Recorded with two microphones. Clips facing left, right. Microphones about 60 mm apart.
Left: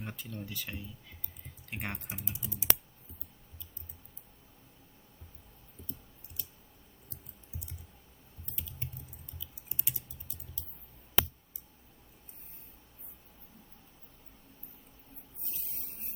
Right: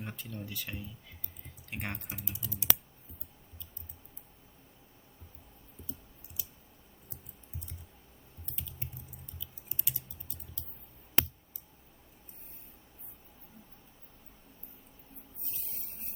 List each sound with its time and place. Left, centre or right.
0.0 s speech: centre
2.0 s speech: left
6.4 s clicking: centre
9.6 s typing: left